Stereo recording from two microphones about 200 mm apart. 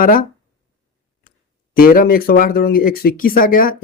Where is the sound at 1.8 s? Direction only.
45° left (ahead or behind).